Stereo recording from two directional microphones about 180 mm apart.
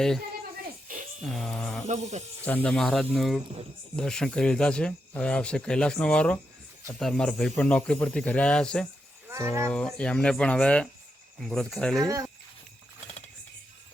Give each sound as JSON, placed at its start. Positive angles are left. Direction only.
{"t": 1.2, "sound": "speech", "side_deg": 0}
{"t": 1.9, "sound": "speech", "side_deg": -40}
{"t": 2.4, "sound": "speech", "side_deg": 10}
{"t": 9.3, "sound": "cattle", "side_deg": -15}
{"t": 9.6, "sound": "speech", "side_deg": 5}
{"t": 12.0, "sound": "speech", "side_deg": -20}